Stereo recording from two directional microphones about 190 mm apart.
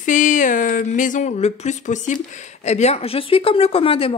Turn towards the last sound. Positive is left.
turn(degrees=30)  # may be behind; listen again after turning